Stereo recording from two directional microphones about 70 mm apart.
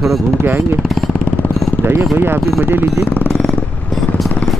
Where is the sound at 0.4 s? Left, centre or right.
Right.